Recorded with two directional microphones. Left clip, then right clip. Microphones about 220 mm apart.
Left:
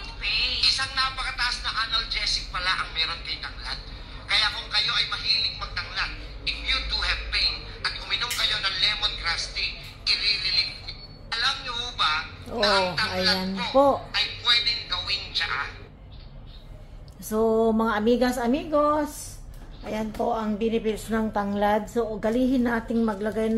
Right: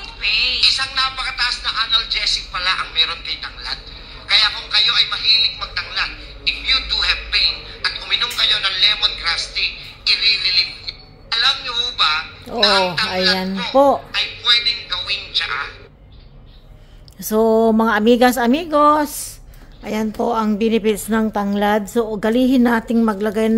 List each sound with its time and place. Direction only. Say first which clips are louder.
0.0 s a sound: right 8 dB; 20° right (ahead or behind)
10.1 s music: right 8 dB; 20° right (ahead or behind)
11.2 s telephone: right 9 dB; 25° right (ahead or behind)
13.7 s speech: right 6 dB; 35° right (ahead or behind)
14.1 s a sound: right 6 dB; 15° right (ahead or behind)
17.3 s a woman's voice: right 8 dB; 40° right (ahead or behind)